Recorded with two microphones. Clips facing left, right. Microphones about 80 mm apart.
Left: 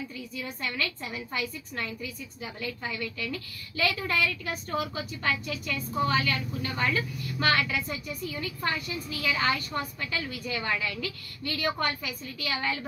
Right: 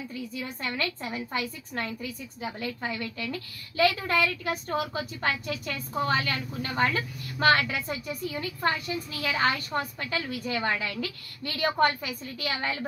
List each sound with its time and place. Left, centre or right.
0.6 s a woman's voice: right
2.4 s a woman's voice: right
9.2 s a woman's voice: right